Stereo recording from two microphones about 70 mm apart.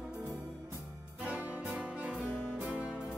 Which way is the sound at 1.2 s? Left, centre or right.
Centre.